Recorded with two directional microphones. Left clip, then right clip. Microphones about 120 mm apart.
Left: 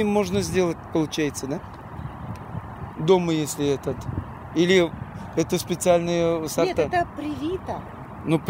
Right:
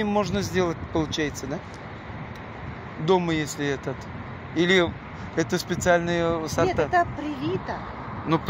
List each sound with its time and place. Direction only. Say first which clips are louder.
0.0 s speech: left 2 dB; 90° left
3.1 s speech: left 2 dB; 65° left (ahead or behind)
6.9 s speech: right 2 dB; 20° left (ahead or behind)